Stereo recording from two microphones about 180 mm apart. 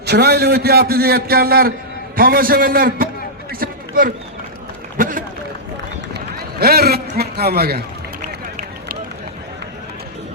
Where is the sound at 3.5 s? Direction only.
55° right (ahead or behind).